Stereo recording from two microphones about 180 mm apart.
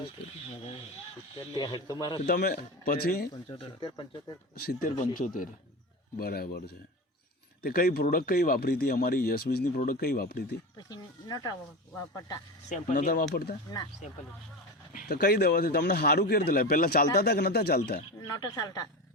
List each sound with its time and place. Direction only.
1.5 s speech: 20° left (ahead or behind)
2.2 s speech: 60° left (ahead or behind)
3.6 s speech: 25° left (ahead or behind)
4.5 s speech: 55° left (ahead or behind)
10.8 s speech: 20° left (ahead or behind)
12.6 s speech: 45° left (ahead or behind)
14.9 s speech: 60° left (ahead or behind)
18.3 s speech: 20° left (ahead or behind)